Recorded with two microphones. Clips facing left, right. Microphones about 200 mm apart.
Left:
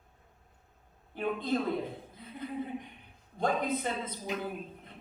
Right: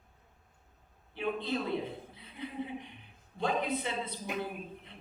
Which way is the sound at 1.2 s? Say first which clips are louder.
Left 3 dB; 45° left (ahead or behind).